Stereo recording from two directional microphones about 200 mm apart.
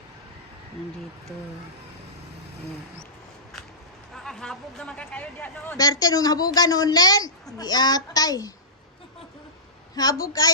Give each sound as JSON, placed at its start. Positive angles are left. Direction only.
{"t": 4.1, "sound": "speech", "side_deg": 0}
{"t": 9.9, "sound": "a woman's voice", "side_deg": 20}